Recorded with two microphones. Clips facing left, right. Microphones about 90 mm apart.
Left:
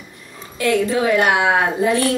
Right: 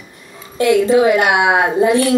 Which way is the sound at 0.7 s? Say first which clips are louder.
Right 5 dB; 15° right (ahead or behind).